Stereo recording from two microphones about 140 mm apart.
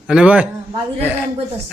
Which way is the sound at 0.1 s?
10° right (ahead or behind).